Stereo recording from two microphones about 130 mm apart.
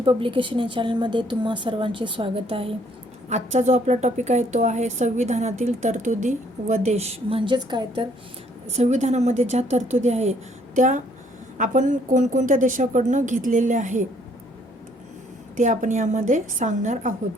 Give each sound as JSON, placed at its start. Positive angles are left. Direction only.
{"t": 0.0, "sound": "speech", "side_deg": -40}
{"t": 3.2, "sound": "speech", "side_deg": -60}
{"t": 8.7, "sound": "speech", "side_deg": -60}
{"t": 10.8, "sound": "a woman's voice", "side_deg": -75}
{"t": 15.5, "sound": "a woman's voice", "side_deg": -75}